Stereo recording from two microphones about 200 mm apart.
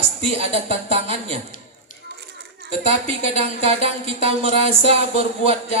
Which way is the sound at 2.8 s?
30° right (ahead or behind).